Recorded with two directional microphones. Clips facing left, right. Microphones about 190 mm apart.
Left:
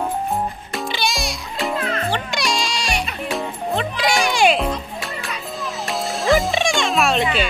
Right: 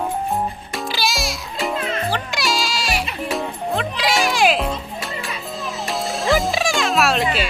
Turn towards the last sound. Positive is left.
turn(degrees=0)  # may be behind; listen again after turning